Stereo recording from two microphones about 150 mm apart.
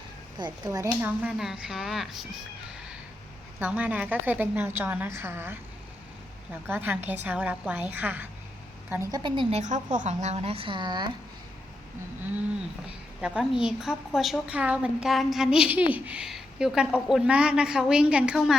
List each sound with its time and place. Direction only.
0.3 s speech: 25° right (ahead or behind)
0.9 s a woman's voice: 5° right (ahead or behind)
3.6 s a woman's voice: 10° right (ahead or behind)
8.9 s a woman's voice: 25° right (ahead or behind)
9.6 s a woman's voice: 55° right (ahead or behind); by 11.1 s 30° right (ahead or behind)
13.2 s a woman's voice: 5° right (ahead or behind)